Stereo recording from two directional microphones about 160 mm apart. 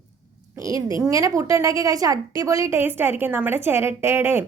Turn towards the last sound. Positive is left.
turn(degrees=-15)  # may be behind; listen again after turning